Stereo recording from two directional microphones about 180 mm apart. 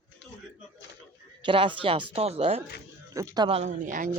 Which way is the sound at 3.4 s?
35° right (ahead or behind).